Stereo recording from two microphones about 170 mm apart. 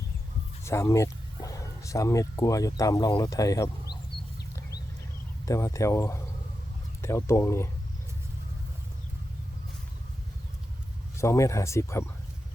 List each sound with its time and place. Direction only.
0.6 s speech: 15° left (ahead or behind)
5.5 s speech: 20° left (ahead or behind)
11.2 s speech: 15° left (ahead or behind)